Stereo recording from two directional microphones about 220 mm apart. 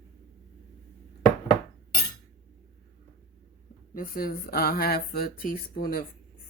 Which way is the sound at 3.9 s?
40° left (ahead or behind).